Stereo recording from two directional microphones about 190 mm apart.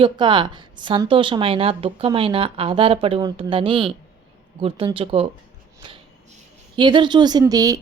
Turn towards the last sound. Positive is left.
turn(degrees=-20)  # may be behind; listen again after turning